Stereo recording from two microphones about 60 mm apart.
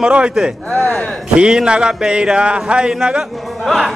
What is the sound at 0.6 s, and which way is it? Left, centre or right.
Speech, left.